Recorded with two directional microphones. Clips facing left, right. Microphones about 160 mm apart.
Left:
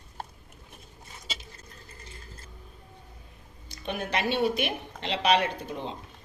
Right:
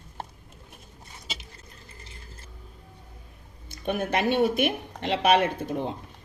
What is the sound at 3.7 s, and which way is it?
A woman's voice, 50° right (ahead or behind).